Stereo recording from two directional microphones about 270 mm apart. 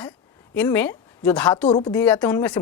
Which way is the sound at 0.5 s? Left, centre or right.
Centre.